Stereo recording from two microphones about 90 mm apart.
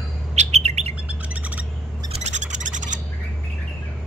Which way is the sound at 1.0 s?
15° right (ahead or behind).